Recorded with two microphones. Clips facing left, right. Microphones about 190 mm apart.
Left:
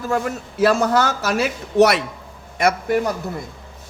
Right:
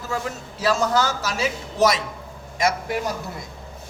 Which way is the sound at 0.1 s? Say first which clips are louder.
Left 5 dB; 55° left (ahead or behind).